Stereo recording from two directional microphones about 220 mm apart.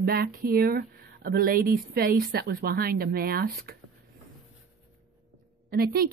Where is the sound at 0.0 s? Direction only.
45° right (ahead or behind).